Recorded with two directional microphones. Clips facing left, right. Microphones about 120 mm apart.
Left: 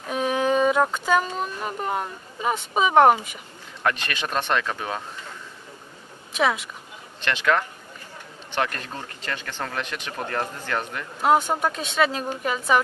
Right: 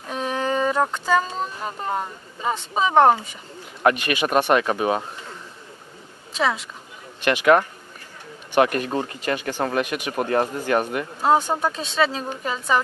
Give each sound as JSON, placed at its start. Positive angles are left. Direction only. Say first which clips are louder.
{"t": 0.1, "sound": "speech", "louder": "left 2 dB", "side_deg": 5}
{"t": 3.8, "sound": "speech", "louder": "right 6 dB", "side_deg": -15}
{"t": 6.3, "sound": "speech", "louder": "even", "side_deg": 5}
{"t": 7.2, "sound": "speech", "louder": "right 6 dB", "side_deg": -15}
{"t": 8.5, "sound": "speech", "louder": "right 8 dB", "side_deg": -15}
{"t": 11.2, "sound": "speech", "louder": "even", "side_deg": 0}